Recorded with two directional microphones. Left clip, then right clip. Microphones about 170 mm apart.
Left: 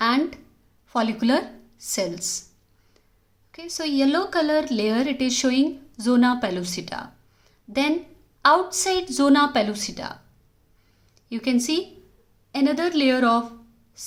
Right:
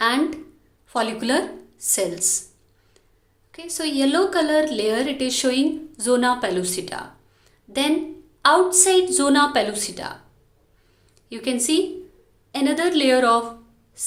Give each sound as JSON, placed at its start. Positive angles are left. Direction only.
{"t": 0.0, "sound": "a sound", "side_deg": 35}
{"t": 0.9, "sound": "speech", "side_deg": 40}
{"t": 3.5, "sound": "speech", "side_deg": 40}
{"t": 7.4, "sound": "a sound", "side_deg": 40}
{"t": 8.4, "sound": "speech", "side_deg": 40}
{"t": 11.3, "sound": "speech", "side_deg": 40}